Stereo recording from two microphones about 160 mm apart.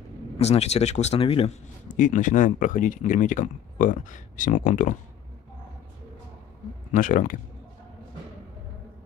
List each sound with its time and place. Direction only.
0.4 s speech: 40° left (ahead or behind)
1.9 s speech: 50° left (ahead or behind)
6.9 s speech: 55° left (ahead or behind)